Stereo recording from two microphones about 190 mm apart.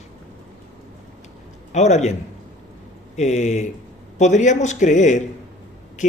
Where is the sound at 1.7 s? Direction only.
35° left (ahead or behind).